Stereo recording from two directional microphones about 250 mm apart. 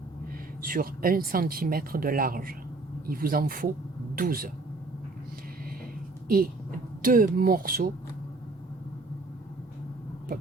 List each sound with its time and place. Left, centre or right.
0.6 s speech: right
6.2 s speech: right